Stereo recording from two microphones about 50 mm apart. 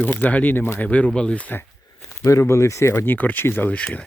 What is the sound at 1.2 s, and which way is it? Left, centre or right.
Speech, centre.